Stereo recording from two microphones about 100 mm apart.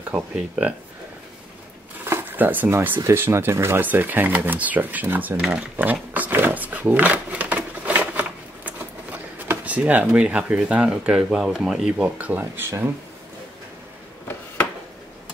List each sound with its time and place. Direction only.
0.1 s speech: 10° right (ahead or behind)
2.0 s a sound: 20° right (ahead or behind)
3.0 s speech: 25° right (ahead or behind); by 12.3 s 5° right (ahead or behind)
12.3 s speech: 20° right (ahead or behind)